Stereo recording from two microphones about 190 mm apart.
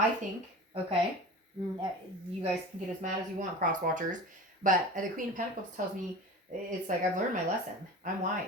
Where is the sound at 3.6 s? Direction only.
40° right (ahead or behind).